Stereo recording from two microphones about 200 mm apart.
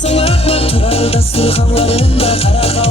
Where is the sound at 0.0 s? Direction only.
30° left (ahead or behind).